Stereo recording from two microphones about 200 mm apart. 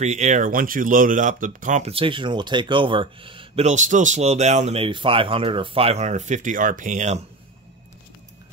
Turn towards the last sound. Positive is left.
turn(degrees=-35)  # may be behind; listen again after turning